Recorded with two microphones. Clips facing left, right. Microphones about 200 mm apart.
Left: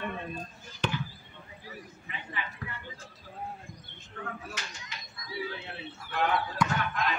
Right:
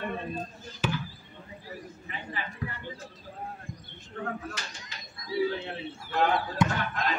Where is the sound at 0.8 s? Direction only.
5° right (ahead or behind).